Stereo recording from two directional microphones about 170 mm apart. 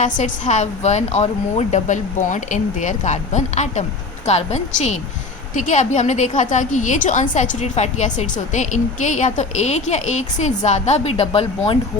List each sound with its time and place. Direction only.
0.0 s a woman's voice: 45° left (ahead or behind)